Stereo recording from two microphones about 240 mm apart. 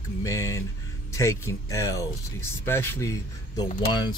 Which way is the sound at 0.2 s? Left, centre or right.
Centre.